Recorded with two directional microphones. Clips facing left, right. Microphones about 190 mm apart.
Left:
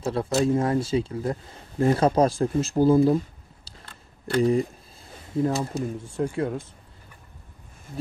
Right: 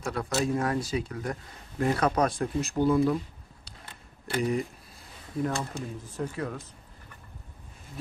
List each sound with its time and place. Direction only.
0.0 s speech: 30° left (ahead or behind)
4.4 s speech: 30° left (ahead or behind)